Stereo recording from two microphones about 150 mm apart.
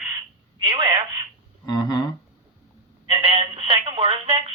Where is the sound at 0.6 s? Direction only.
30° right (ahead or behind).